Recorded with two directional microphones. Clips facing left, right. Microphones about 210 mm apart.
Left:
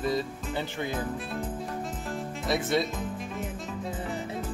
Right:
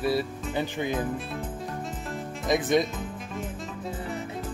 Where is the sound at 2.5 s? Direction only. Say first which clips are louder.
Right 4 dB; 15° right (ahead or behind).